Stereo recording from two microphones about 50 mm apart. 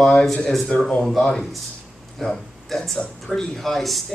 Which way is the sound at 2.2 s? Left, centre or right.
Centre.